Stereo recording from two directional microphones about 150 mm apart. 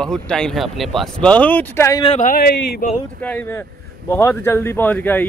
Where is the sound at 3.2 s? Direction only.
10° left (ahead or behind).